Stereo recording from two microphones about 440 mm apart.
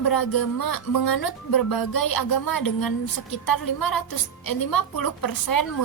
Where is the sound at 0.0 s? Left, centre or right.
Left.